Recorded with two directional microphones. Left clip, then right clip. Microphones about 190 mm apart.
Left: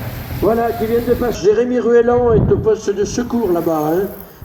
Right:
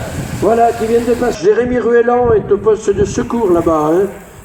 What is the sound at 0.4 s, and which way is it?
Speech, 65° right (ahead or behind).